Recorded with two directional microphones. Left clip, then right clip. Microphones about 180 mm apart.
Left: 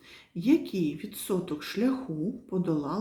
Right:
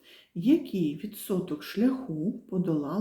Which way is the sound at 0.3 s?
15° left (ahead or behind).